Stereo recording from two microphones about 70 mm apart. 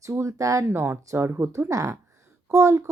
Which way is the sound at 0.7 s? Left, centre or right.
Right.